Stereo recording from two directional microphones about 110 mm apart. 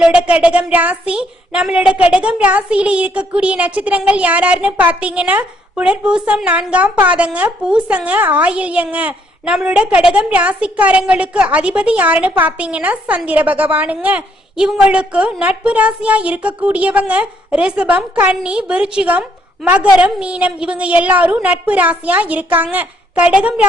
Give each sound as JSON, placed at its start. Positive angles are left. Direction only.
{"t": 0.0, "sound": "a woman's voice", "side_deg": -10}